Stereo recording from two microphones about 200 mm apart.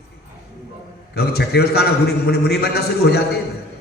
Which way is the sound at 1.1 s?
55° left (ahead or behind).